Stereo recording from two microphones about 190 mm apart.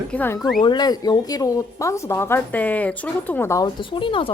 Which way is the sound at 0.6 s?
20° left (ahead or behind).